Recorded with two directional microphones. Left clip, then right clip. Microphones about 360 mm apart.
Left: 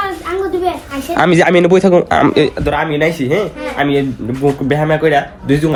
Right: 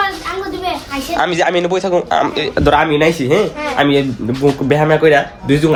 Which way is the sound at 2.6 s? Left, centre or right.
Centre.